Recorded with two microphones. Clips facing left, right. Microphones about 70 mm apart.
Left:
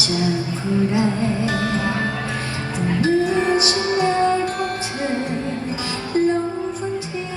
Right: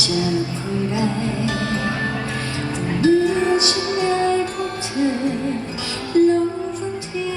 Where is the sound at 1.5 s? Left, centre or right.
Left.